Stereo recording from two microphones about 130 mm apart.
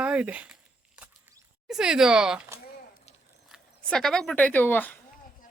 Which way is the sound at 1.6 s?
5° right (ahead or behind).